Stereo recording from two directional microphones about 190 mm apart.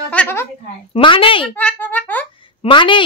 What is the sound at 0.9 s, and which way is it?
Speech, 25° left (ahead or behind).